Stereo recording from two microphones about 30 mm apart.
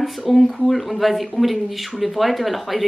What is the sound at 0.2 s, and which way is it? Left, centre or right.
Speech, centre.